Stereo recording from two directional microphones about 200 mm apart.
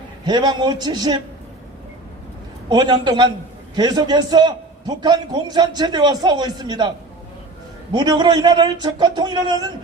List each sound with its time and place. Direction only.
0.3 s a man's voice: 20° right (ahead or behind)
2.6 s a man's voice: 20° right (ahead or behind)
7.9 s a man's voice: 20° right (ahead or behind)